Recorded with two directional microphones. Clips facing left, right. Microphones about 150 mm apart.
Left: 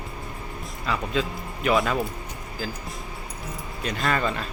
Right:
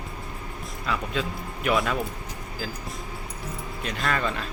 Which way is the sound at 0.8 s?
Centre (ahead or behind).